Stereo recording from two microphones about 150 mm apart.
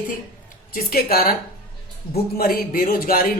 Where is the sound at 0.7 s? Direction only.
85° left.